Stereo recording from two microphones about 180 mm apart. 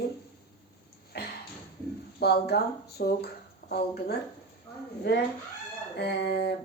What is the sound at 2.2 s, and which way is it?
Speech, 65° left (ahead or behind).